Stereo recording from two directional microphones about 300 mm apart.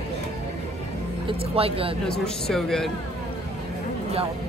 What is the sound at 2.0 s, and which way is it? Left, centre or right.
Speech, centre.